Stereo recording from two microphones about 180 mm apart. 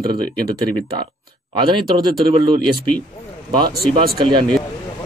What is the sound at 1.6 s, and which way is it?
Speech, 25° right (ahead or behind).